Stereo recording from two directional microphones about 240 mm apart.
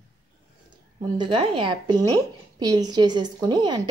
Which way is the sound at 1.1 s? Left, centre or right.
Right.